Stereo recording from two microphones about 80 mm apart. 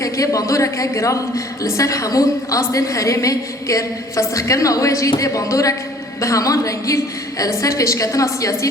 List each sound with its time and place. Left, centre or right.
0.0 s a woman's voice: left